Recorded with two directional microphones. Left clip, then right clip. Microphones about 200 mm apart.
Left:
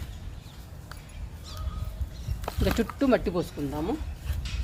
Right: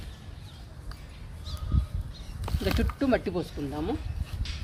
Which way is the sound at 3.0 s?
25° left (ahead or behind).